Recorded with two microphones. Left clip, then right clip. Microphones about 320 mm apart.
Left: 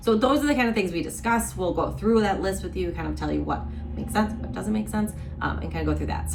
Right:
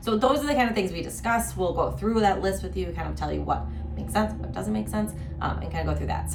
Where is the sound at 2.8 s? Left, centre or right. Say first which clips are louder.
Left 2 dB; centre.